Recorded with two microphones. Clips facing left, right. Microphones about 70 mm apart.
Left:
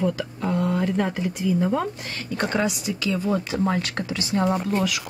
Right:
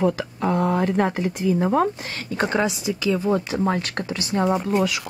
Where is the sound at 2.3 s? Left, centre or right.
Centre.